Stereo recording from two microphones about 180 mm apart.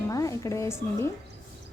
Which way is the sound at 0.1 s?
20° left (ahead or behind).